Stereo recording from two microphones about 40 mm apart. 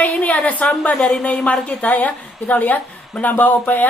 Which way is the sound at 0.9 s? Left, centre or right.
Left.